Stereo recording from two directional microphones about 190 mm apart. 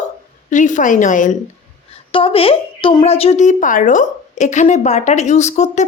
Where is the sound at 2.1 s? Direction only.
30° left (ahead or behind).